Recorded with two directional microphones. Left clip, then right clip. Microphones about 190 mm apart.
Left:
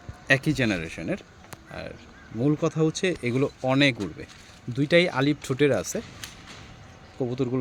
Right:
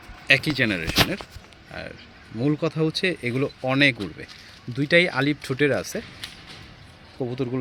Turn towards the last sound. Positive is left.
turn(degrees=0)  # may be behind; listen again after turning